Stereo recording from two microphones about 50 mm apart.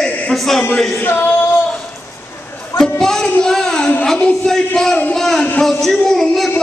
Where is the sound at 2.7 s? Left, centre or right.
Centre.